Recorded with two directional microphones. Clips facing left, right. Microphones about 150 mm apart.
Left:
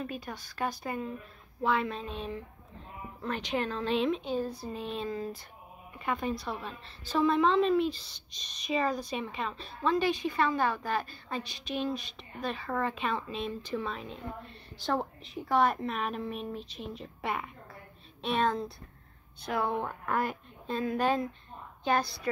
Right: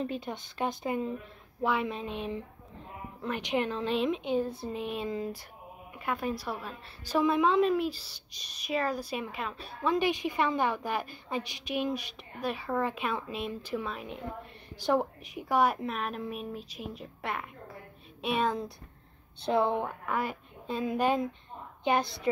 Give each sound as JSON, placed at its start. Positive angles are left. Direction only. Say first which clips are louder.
{"t": 0.0, "sound": "a woman's voice", "louder": "right 4 dB", "side_deg": -25}
{"t": 18.2, "sound": "a woman's voice", "louder": "even", "side_deg": -10}
{"t": 19.4, "sound": "speech", "louder": "right 4 dB", "side_deg": -25}
{"t": 20.1, "sound": "a woman's voice", "louder": "left 1 dB", "side_deg": -5}